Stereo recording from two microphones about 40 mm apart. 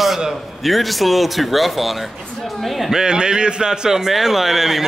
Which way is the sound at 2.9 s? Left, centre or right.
Centre.